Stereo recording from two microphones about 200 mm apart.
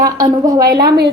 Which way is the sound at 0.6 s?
50° right (ahead or behind).